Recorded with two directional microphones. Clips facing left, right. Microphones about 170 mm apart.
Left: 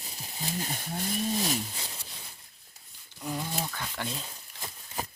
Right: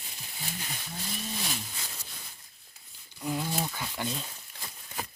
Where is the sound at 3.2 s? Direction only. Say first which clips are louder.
Right 2 dB; 5° right (ahead or behind).